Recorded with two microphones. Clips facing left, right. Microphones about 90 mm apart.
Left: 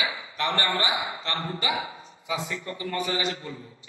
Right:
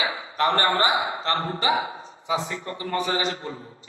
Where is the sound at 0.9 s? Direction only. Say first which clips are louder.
Right 6 dB; 35° right (ahead or behind).